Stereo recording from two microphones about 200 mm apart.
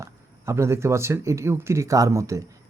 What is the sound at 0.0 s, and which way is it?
Speech, 15° right (ahead or behind).